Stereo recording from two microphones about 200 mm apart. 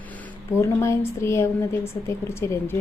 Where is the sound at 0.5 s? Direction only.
15° left (ahead or behind).